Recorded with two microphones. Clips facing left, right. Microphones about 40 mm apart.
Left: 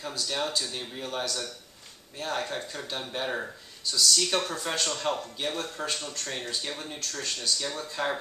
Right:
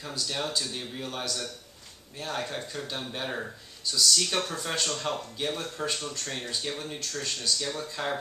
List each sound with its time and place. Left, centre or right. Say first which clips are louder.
0.0 s a man's voice: left 1 dB; centre